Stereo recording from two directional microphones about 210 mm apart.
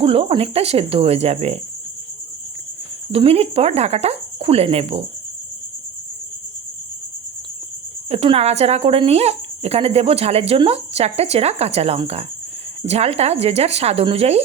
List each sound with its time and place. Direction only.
0.0 s speech: 25° right (ahead or behind)
3.1 s speech: 30° right (ahead or behind)
8.1 s speech: 30° right (ahead or behind)